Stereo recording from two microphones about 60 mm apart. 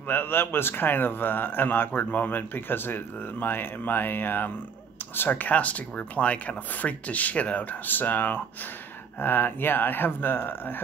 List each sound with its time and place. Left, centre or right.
0.1 s speech: left